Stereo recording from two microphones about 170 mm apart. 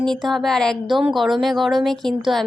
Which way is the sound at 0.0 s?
Centre (ahead or behind).